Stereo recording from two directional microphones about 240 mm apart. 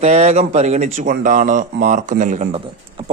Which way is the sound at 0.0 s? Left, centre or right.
Right.